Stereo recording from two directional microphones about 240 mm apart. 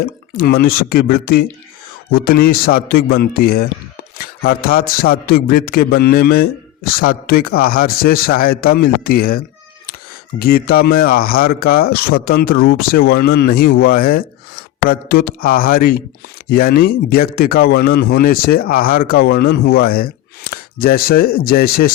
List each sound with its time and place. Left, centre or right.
0.0 s speech: left